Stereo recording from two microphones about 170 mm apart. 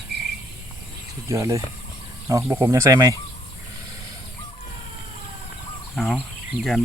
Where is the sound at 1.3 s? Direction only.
20° right (ahead or behind).